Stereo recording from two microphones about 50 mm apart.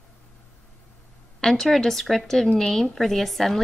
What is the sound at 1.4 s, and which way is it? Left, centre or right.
A woman's voice, centre.